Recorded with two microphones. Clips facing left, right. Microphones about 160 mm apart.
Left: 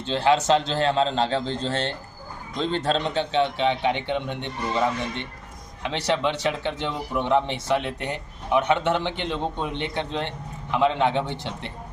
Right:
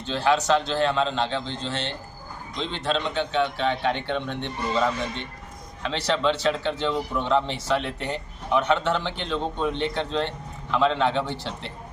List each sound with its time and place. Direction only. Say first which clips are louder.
0.0 s a man's voice: left 2 dB; 25° left (ahead or behind)